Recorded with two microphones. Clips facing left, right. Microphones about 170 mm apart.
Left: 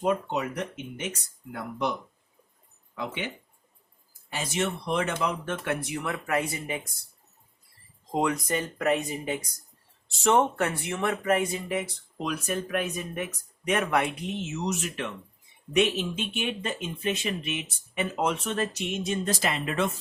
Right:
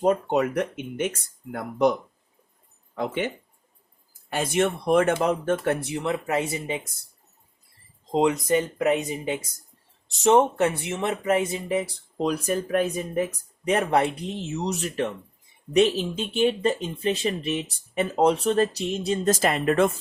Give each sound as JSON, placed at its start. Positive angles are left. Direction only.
{"t": 0.3, "sound": "speech", "side_deg": -55}
{"t": 8.1, "sound": "speech", "side_deg": -20}